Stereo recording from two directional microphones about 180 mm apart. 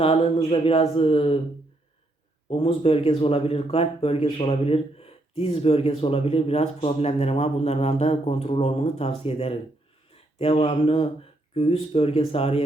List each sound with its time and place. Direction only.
0.0 s speech: 30° left (ahead or behind)
2.5 s speech: 30° left (ahead or behind)